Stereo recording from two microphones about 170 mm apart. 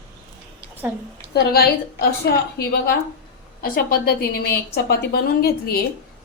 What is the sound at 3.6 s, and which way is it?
Speech, 60° left (ahead or behind).